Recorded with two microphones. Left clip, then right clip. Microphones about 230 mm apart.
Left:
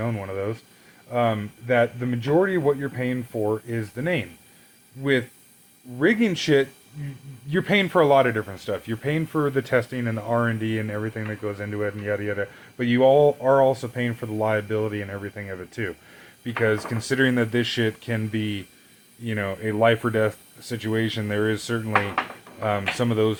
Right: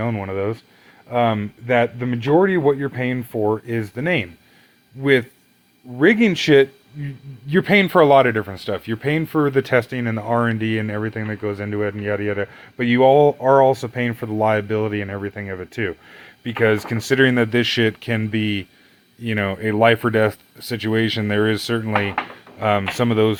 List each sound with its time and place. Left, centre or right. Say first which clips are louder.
0.0 s speech: right 5 dB; right
6.0 s speech: right 6 dB; right